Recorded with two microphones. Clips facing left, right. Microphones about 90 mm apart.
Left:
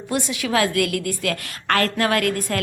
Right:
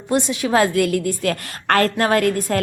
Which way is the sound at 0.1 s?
30° right (ahead or behind).